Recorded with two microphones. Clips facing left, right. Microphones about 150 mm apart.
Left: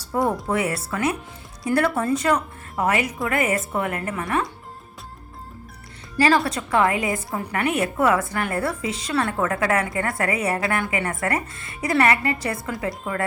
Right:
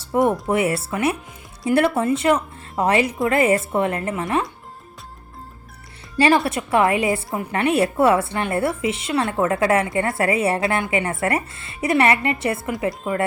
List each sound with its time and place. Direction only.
0.0 s a woman's voice: 25° right (ahead or behind)
6.1 s a woman's voice: 25° right (ahead or behind)